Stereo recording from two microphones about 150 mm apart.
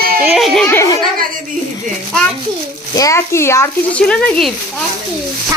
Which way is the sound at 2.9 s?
20° left (ahead or behind).